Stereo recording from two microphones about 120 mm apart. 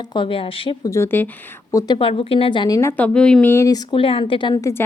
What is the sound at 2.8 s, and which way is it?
Speech, 20° left (ahead or behind).